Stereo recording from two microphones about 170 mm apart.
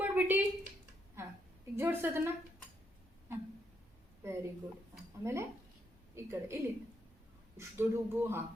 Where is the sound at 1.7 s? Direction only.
15° right (ahead or behind).